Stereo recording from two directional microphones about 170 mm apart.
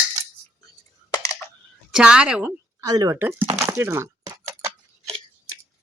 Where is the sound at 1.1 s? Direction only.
20° left (ahead or behind).